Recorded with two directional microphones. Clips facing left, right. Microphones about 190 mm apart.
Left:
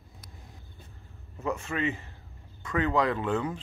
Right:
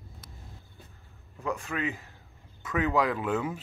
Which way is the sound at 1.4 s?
Centre (ahead or behind).